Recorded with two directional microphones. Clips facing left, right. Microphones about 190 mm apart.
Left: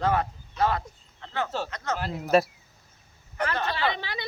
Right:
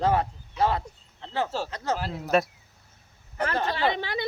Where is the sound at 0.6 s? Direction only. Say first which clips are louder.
Right 1 dB; 30° right (ahead or behind).